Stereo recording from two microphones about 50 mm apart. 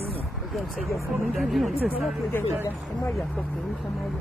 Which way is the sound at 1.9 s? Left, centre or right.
Left.